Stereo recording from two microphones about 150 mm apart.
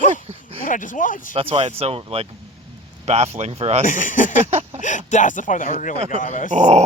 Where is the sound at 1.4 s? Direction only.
40° right (ahead or behind).